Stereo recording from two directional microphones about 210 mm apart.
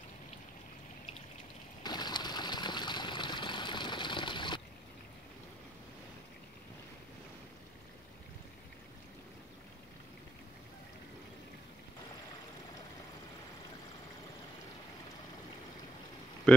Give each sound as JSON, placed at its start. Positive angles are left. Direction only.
{"t": 1.8, "sound": "water", "side_deg": 20}
{"t": 16.5, "sound": "speech", "side_deg": 5}